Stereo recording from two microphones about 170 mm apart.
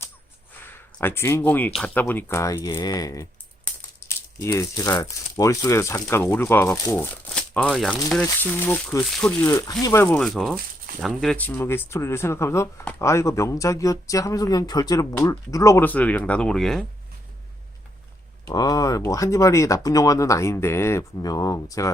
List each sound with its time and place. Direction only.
0.6 s speech: 15° left (ahead or behind)
4.4 s speech: 20° left (ahead or behind)
9.5 s speech: 20° left (ahead or behind)
10.2 s speech: centre (ahead or behind)
18.4 s speech: 20° left (ahead or behind)